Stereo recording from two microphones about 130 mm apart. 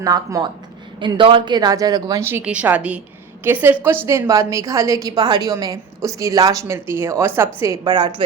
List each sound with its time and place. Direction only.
0.0 s a woman's voice: 25° right (ahead or behind)
0.9 s speech: 40° right (ahead or behind)
2.2 s a woman's voice: 15° right (ahead or behind)